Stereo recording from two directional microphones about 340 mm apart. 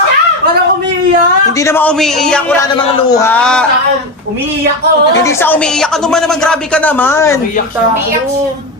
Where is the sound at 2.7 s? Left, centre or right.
Centre.